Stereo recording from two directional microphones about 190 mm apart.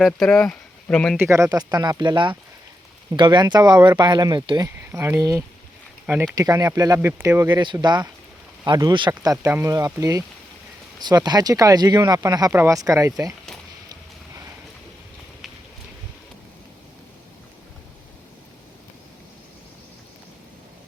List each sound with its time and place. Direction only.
0.0 s speech: 5° left (ahead or behind)
1.1 s speech: 15° right (ahead or behind)
4.9 s speech: 10° right (ahead or behind)